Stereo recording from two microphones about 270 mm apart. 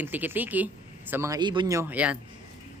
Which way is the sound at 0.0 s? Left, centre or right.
Centre.